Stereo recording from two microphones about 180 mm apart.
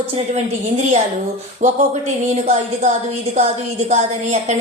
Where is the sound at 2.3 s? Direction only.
40° right (ahead or behind).